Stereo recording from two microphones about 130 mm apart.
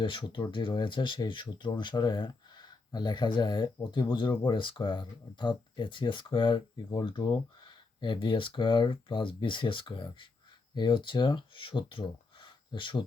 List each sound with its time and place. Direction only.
0.0 s speech: 40° left (ahead or behind)